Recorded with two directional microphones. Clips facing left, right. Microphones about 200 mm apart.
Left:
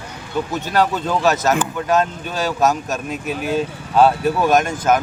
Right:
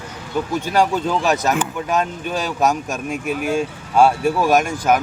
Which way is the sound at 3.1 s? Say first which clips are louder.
Right 2 dB; 50° right (ahead or behind).